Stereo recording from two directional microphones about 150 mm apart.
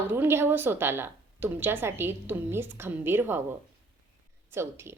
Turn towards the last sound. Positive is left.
turn(degrees=-15)  # may be behind; listen again after turning